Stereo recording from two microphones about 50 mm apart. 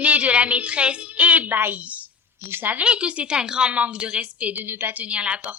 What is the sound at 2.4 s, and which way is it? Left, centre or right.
Speech, right.